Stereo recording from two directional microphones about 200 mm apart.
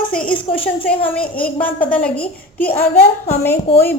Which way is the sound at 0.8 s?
5° left (ahead or behind).